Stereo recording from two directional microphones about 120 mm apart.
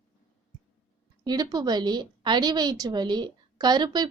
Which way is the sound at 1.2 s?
35° right (ahead or behind).